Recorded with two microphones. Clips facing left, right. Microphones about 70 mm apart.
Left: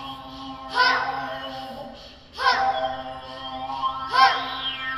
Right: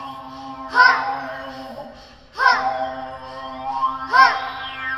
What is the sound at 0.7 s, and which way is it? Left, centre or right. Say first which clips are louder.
Child singing: right 6 dB; right.